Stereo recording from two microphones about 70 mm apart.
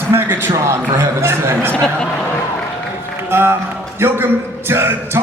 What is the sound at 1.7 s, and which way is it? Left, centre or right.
Speech, centre.